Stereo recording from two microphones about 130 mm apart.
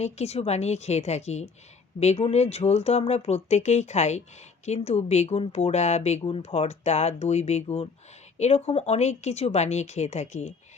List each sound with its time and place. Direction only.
0.0 s speech: 55° left (ahead or behind)